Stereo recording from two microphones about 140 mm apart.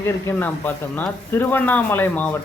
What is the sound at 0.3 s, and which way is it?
A man's voice, 15° left (ahead or behind).